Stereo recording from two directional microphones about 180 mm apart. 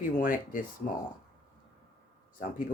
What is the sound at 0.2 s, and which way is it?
Speech, 50° left (ahead or behind).